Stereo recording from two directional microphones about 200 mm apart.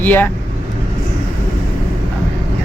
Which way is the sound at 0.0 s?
10° left (ahead or behind).